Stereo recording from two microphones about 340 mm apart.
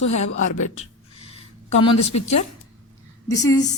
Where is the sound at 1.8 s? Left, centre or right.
Left.